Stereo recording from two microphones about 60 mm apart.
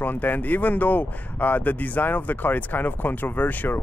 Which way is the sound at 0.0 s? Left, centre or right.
Left.